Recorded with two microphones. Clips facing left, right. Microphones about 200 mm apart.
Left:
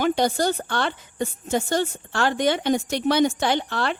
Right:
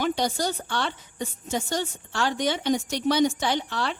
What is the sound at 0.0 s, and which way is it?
A woman's voice, 55° left (ahead or behind).